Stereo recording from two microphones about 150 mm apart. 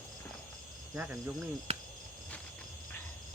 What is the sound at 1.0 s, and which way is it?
Speech, 10° right (ahead or behind).